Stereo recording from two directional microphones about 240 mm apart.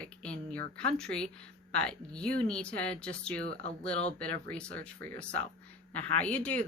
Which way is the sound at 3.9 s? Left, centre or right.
Left.